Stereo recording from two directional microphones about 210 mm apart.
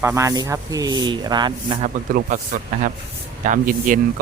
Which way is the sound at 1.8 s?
40° right (ahead or behind).